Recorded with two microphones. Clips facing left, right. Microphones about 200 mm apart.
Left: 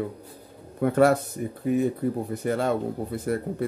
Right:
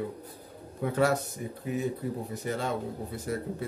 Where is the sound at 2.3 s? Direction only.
55° left (ahead or behind).